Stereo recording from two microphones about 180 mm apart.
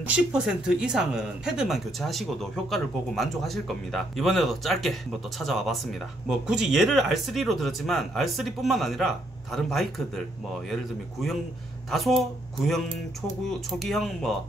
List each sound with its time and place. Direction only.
0.0 s speech: 5° right (ahead or behind)
13.5 s speech: centre (ahead or behind)